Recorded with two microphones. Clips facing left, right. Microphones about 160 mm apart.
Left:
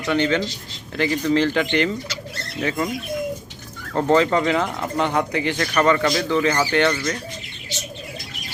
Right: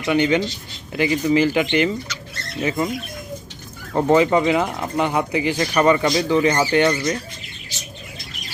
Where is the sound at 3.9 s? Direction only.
10° right (ahead or behind).